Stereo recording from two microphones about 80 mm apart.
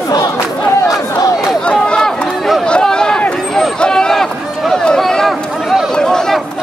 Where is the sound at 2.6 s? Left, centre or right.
Centre.